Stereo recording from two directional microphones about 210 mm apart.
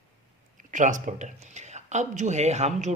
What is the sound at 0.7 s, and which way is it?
Speech, 35° right (ahead or behind).